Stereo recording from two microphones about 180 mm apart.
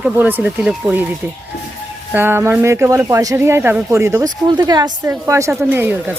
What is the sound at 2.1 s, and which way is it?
Speech, 10° right (ahead or behind).